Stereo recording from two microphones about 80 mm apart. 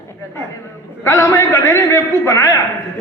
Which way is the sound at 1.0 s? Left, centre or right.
Left.